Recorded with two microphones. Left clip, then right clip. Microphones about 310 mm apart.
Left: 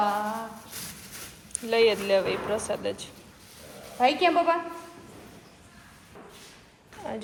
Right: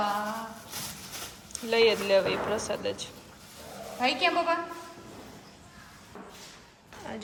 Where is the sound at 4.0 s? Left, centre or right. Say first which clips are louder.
Left 4 dB; centre.